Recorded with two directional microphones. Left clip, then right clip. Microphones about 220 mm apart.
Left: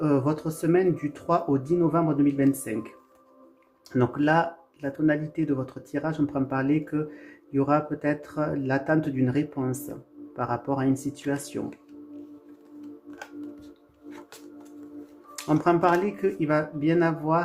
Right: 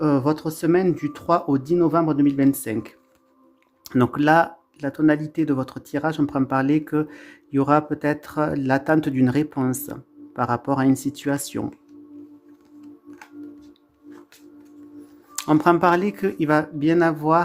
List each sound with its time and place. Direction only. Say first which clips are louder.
0.0 s speech: right 4 dB; 40° right (ahead or behind)
13.1 s singing bowl: even; 10° right (ahead or behind)
15.4 s speech: right 5 dB; 45° right (ahead or behind)